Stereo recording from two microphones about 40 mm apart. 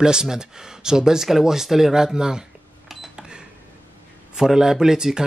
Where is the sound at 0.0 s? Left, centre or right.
Centre.